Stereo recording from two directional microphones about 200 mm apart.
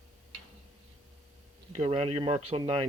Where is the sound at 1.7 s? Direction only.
30° right (ahead or behind).